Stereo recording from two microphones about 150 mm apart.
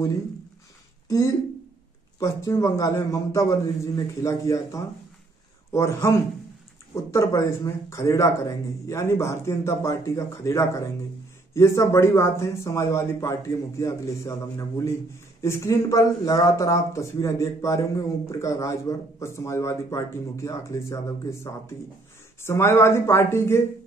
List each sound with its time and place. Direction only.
1.0 s speech: 25° left (ahead or behind)
15.4 s speech: 20° left (ahead or behind)